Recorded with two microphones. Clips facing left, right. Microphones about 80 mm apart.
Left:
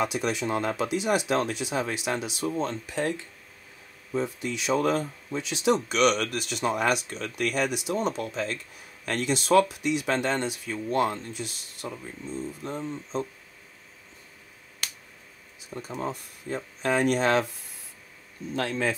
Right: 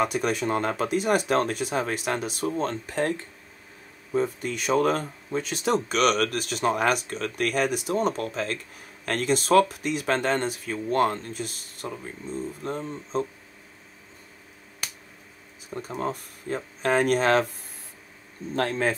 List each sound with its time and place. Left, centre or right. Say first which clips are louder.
0.0 s speech: right 2 dB; right
15.7 s speech: right 3 dB; right
18.5 s speech: right 3 dB; right